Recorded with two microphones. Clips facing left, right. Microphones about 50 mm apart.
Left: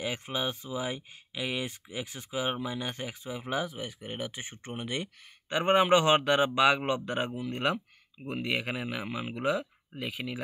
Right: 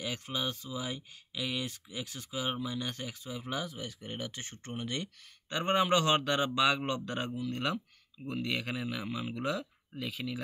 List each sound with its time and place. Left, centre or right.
0.0 s speech: left